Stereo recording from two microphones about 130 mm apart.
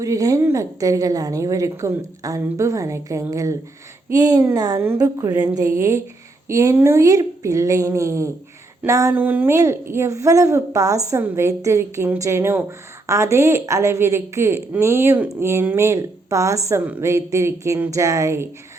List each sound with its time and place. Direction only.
0.0 s a woman's voice: 25° right (ahead or behind)
16.8 s speech: 10° right (ahead or behind)
17.1 s a woman's voice: 20° right (ahead or behind)